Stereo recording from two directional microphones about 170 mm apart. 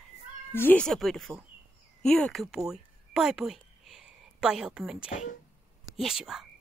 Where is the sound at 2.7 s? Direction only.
5° right (ahead or behind).